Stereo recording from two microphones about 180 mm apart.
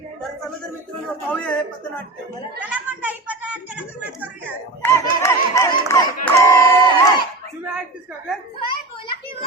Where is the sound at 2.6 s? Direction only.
10° right (ahead or behind).